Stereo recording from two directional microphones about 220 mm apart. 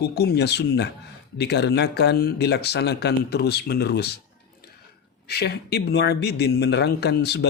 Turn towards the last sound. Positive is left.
turn(degrees=50)  # may be behind; listen again after turning